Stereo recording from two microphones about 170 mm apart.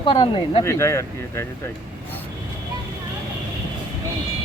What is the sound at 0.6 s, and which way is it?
Speech, 15° left (ahead or behind).